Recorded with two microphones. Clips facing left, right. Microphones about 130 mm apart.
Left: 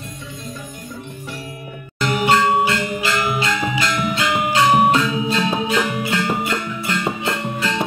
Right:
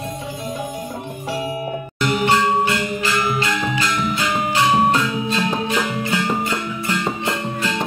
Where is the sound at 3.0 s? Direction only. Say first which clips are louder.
Even; 15° left (ahead or behind).